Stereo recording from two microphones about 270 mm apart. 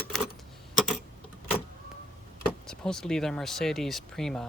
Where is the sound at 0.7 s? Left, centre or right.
Centre.